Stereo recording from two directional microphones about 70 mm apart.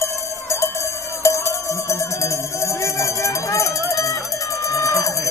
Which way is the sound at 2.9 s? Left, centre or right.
Left.